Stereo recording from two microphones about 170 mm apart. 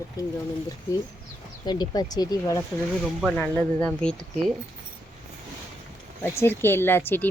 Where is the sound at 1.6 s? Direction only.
25° left (ahead or behind).